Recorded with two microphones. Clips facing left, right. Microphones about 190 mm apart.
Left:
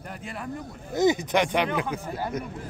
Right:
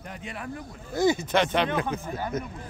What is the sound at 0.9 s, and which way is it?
Speech, 20° left (ahead or behind).